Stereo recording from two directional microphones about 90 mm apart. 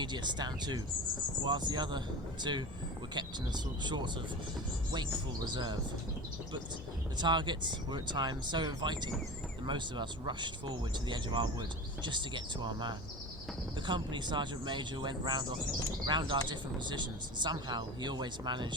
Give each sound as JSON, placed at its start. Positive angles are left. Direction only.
{"t": 0.0, "sound": "speech", "side_deg": -55}
{"t": 7.2, "sound": "speech", "side_deg": -55}